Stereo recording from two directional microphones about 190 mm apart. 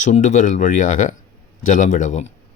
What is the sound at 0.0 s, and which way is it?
Speech, 40° left (ahead or behind).